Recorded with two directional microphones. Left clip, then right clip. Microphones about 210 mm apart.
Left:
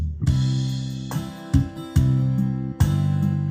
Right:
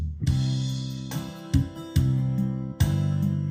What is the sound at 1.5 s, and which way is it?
Music, 15° right (ahead or behind).